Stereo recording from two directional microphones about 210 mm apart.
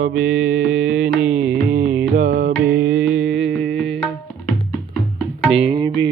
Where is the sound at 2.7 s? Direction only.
75° right (ahead or behind).